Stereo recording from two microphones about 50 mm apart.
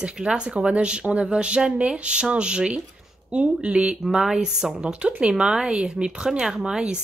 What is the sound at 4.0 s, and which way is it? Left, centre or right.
Speech, centre.